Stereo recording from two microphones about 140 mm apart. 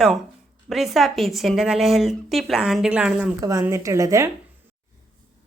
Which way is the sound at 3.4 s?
25° right (ahead or behind).